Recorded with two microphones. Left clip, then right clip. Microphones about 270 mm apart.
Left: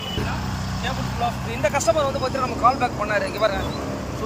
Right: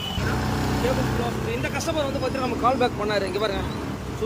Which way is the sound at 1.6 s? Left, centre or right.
Centre.